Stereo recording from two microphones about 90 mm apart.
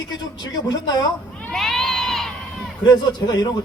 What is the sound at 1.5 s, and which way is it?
Crowd, centre (ahead or behind).